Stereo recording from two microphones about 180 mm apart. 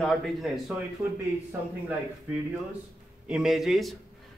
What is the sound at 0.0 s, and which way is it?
Speech, centre (ahead or behind).